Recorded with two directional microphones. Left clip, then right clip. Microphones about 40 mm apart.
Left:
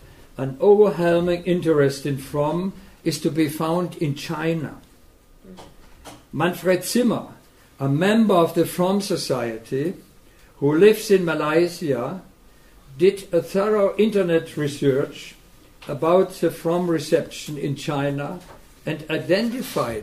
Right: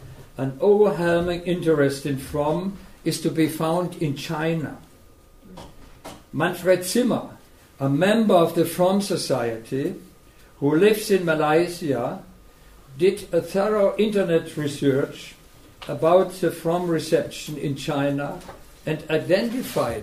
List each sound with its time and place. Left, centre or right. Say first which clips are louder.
0.4 s speech: left 2 dB; centre
6.3 s speech: even; centre